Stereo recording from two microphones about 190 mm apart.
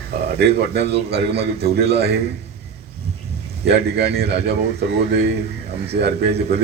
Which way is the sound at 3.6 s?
60° right (ahead or behind).